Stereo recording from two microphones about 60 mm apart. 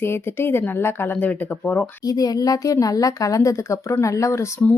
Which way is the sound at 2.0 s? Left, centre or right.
Left.